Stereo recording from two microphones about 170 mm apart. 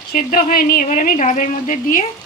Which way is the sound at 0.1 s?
55° left (ahead or behind).